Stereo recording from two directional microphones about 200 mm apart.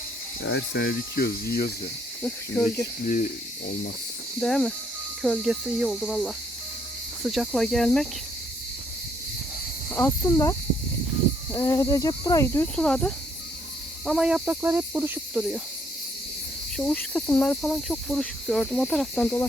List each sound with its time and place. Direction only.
0.4 s speech: 55° left (ahead or behind)
3.1 s speech: 40° left (ahead or behind)
4.4 s cricket: 5° left (ahead or behind)
9.9 s speech: 10° left (ahead or behind)
11.5 s speech: 15° left (ahead or behind)
14.0 s cricket: centre (ahead or behind)
16.7 s cricket: 5° left (ahead or behind)